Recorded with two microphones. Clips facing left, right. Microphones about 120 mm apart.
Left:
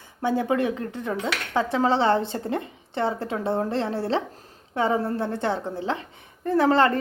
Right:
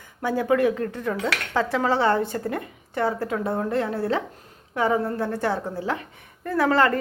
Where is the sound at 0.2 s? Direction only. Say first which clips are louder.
Right 2 dB; 25° left (ahead or behind).